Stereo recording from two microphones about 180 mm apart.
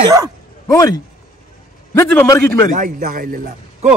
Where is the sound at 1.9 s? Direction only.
15° left (ahead or behind).